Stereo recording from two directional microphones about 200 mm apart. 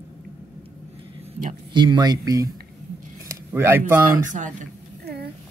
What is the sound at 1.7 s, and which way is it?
Speech, 25° right (ahead or behind).